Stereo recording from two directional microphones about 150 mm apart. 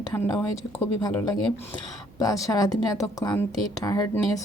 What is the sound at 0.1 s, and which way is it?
Speech, 25° left (ahead or behind).